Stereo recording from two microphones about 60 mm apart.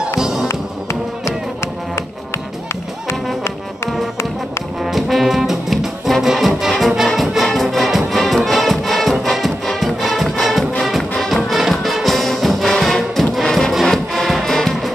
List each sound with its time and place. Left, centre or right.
0.2 s music: centre
0.5 s music: left
4.8 s brass instrument: centre
7.5 s music: centre